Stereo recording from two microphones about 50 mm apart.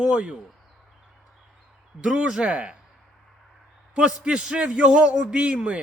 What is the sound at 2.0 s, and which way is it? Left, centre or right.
Speech, right.